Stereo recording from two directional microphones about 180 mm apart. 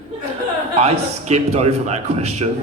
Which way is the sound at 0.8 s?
35° right (ahead or behind).